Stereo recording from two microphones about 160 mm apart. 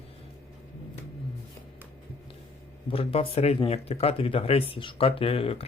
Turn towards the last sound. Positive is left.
turn(degrees=35)  # may be behind; listen again after turning